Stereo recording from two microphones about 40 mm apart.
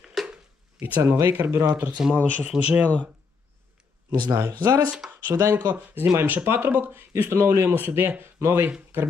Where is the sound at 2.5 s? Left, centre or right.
Centre.